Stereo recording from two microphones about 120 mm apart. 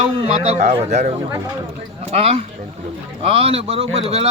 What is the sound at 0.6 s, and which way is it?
Speech, 80° right.